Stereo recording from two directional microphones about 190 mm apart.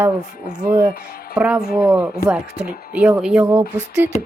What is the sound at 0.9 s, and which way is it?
Speech, 50° left (ahead or behind).